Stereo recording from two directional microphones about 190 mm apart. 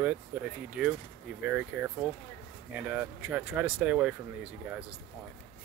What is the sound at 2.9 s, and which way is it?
Speech, 10° right (ahead or behind).